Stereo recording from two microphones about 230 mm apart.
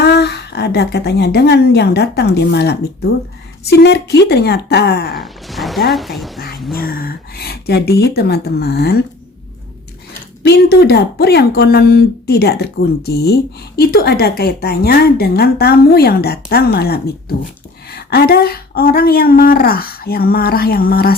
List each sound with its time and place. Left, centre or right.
0.0 s a woman's voice: left
5.1 s a sound: centre
5.9 s speech: centre
6.7 s speech: left
10.4 s a woman's voice: left